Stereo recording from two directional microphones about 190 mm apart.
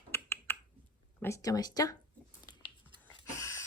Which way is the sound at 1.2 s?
15° left (ahead or behind).